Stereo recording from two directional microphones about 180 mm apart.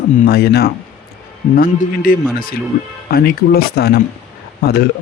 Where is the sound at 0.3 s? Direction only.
60° left (ahead or behind).